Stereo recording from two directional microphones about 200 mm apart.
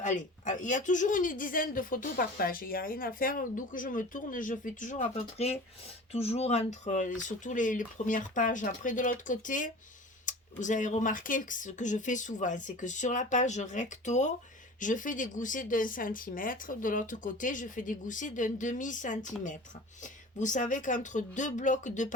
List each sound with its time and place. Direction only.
0.0 s speech: 35° left (ahead or behind)
20.4 s speech: 40° left (ahead or behind)